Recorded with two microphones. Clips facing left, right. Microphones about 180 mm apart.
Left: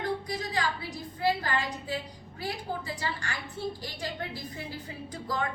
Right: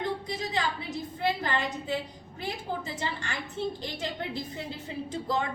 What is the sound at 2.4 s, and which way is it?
A woman's voice, 20° right (ahead or behind).